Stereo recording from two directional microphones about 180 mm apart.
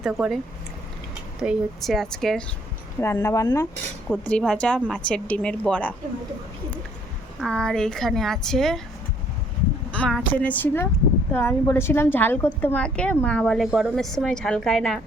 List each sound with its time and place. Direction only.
0.0 s a woman's voice: centre (ahead or behind)
1.4 s a woman's voice: centre (ahead or behind)
3.0 s speech: 15° left (ahead or behind)
4.1 s a woman's voice: 5° left (ahead or behind)
7.3 s a woman's voice: 5° left (ahead or behind)
9.9 s a woman's voice: 5° left (ahead or behind)